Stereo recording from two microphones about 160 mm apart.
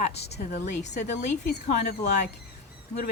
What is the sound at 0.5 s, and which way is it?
Speech, 45° left (ahead or behind).